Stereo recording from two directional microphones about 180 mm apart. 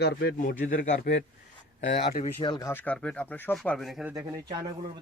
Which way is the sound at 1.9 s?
65° left (ahead or behind).